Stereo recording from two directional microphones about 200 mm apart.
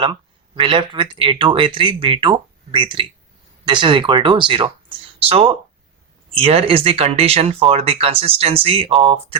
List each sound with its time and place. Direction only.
0.0 s speech: 25° right (ahead or behind)